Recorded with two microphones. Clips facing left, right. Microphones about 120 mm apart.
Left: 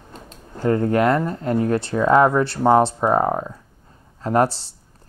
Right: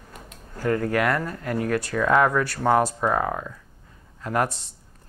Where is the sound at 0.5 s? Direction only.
25° left (ahead or behind).